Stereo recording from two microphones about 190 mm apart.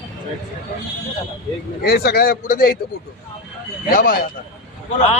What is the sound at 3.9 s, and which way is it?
Speech, 50° left (ahead or behind).